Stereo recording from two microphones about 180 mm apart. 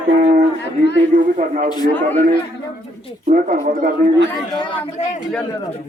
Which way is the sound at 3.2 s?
40° right (ahead or behind).